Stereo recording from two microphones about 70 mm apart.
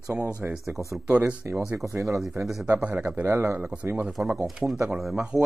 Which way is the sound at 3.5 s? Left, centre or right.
Centre.